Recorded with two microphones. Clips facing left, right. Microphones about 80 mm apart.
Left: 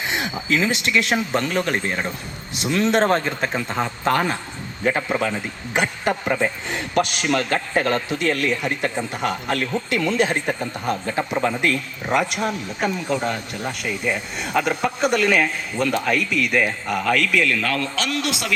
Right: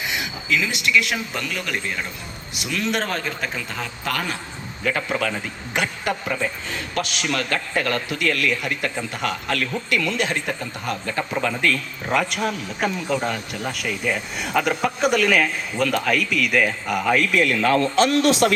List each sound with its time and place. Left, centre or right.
0.1 s a man's voice: left
6.2 s speech: left
6.7 s speech: left
7.0 s a man's voice: left
11.1 s speech: centre
12.8 s speech: centre
16.9 s a man's voice: centre
17.5 s speech: right